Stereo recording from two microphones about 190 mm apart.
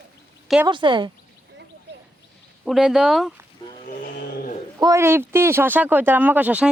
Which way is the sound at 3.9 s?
50° left (ahead or behind).